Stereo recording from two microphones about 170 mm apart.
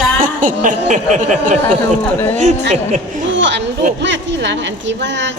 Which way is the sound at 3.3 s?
90° right.